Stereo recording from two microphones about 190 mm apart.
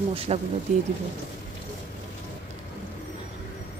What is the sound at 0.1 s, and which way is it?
Speech, 30° right (ahead or behind).